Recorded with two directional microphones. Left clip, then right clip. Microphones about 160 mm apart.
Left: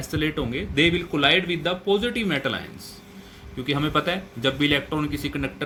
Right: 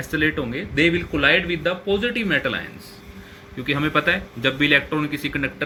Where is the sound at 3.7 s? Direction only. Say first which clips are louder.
Right 4 dB; 35° left (ahead or behind).